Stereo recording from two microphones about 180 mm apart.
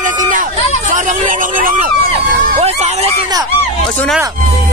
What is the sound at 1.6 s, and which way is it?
Speech, 50° right (ahead or behind).